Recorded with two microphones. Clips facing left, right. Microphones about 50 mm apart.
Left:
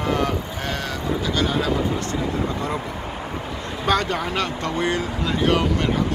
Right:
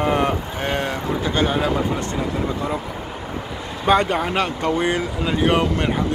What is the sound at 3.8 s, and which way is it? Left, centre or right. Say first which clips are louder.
Speech: right 4 dB; right.